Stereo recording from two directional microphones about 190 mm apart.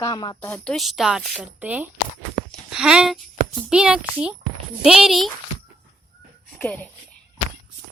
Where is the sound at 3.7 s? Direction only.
5° right (ahead or behind).